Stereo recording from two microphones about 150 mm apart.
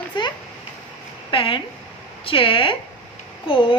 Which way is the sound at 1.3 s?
35° left (ahead or behind).